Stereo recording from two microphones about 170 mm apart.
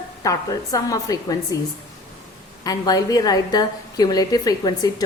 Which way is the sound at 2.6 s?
20° left (ahead or behind).